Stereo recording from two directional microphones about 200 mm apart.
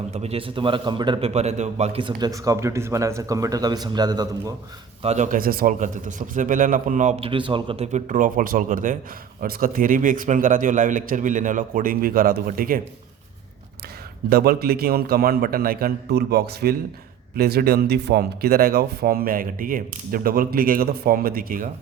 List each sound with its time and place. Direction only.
0.1 s a man's voice: 30° right (ahead or behind)
5.0 s a man's voice: 35° right (ahead or behind)
14.3 s speech: 50° right (ahead or behind)